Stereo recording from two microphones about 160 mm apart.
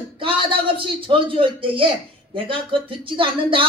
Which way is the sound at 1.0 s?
35° right (ahead or behind).